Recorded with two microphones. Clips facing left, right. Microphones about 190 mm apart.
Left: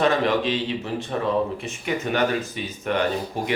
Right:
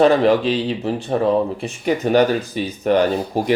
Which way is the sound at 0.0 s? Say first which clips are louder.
Right 7 dB; 35° right (ahead or behind).